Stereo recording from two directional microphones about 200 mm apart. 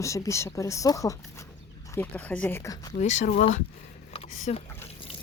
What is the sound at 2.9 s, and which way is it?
Speech, 35° left (ahead or behind).